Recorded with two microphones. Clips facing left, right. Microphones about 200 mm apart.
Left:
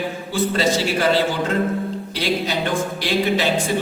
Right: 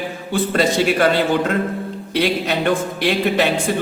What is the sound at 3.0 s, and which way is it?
Speech, 60° right (ahead or behind).